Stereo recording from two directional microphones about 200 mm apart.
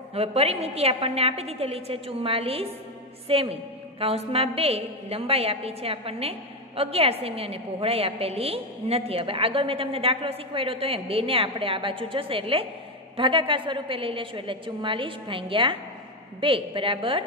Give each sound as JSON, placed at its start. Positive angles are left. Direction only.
{"t": 0.1, "sound": "a woman's voice", "side_deg": -30}